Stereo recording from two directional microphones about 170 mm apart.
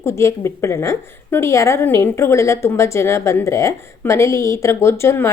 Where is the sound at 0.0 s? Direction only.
15° left (ahead or behind).